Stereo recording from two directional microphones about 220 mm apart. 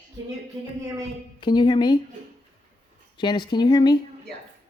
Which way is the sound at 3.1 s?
20° left (ahead or behind).